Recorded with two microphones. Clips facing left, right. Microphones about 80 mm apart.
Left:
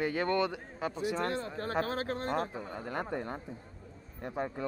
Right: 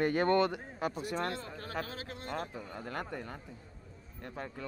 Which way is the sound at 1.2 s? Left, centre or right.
Left.